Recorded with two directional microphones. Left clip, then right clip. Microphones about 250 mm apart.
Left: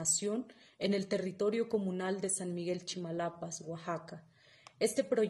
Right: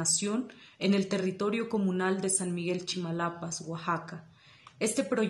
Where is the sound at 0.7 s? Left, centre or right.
Left.